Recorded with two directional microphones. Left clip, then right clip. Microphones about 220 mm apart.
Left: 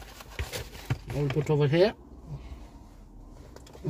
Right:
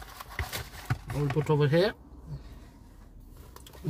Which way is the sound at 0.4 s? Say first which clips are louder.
Even; 20° right (ahead or behind).